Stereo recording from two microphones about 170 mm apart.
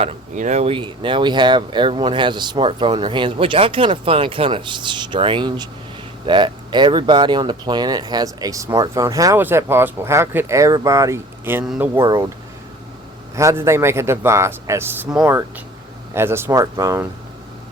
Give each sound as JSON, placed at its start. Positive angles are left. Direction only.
{"t": 0.0, "sound": "a man's voice", "side_deg": -40}
{"t": 12.0, "sound": "speech", "side_deg": -20}
{"t": 13.3, "sound": "a man's voice", "side_deg": -15}